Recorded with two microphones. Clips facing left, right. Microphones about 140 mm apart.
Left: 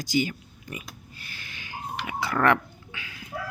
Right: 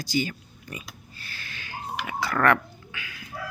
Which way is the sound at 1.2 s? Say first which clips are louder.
Right 3 dB; 15° left (ahead or behind).